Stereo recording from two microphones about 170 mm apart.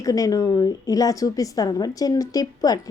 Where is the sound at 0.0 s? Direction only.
20° left (ahead or behind).